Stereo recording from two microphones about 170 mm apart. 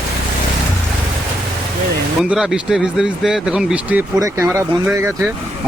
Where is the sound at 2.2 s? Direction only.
Centre (ahead or behind).